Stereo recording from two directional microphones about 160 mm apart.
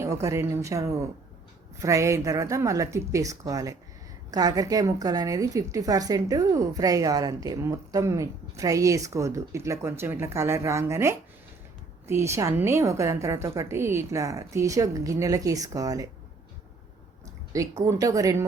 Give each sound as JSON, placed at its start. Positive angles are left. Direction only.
{"t": 0.0, "sound": "a woman's voice", "side_deg": -20}
{"t": 17.5, "sound": "a woman's voice", "side_deg": -20}